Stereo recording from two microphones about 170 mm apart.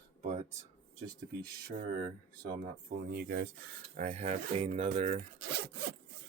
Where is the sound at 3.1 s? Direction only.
70° right (ahead or behind).